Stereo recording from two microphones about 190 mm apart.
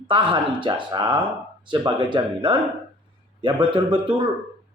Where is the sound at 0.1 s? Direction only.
25° right (ahead or behind).